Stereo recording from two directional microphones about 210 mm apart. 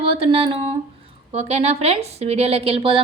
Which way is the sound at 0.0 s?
30° right (ahead or behind).